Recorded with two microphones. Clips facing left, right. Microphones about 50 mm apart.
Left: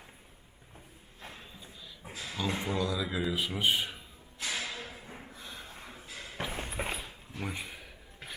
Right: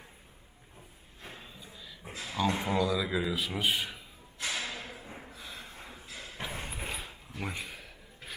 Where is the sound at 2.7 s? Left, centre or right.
Centre.